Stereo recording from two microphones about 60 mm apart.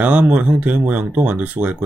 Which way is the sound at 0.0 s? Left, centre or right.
Right.